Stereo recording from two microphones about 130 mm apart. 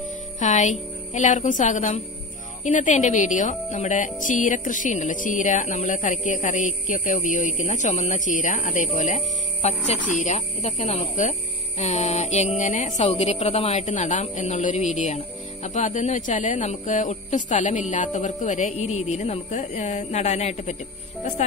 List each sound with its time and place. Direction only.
0.4 s a woman's voice: 70° left (ahead or behind)